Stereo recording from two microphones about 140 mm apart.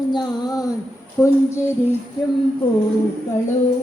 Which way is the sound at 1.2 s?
15° left (ahead or behind).